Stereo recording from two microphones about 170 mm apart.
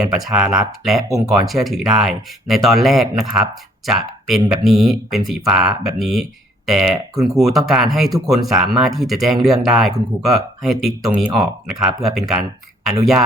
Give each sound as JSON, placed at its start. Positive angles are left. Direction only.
{"t": 0.1, "sound": "speech", "side_deg": 0}
{"t": 1.0, "sound": "speech", "side_deg": -20}
{"t": 1.5, "sound": "speech", "side_deg": 0}